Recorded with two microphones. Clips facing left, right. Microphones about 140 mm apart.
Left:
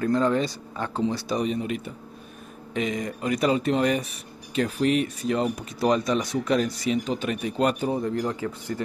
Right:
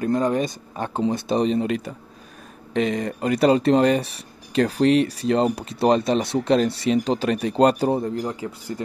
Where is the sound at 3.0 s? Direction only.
35° right (ahead or behind).